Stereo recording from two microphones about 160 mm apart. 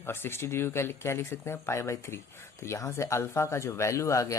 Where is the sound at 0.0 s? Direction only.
15° left (ahead or behind).